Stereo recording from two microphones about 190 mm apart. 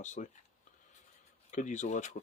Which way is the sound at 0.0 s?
40° left (ahead or behind).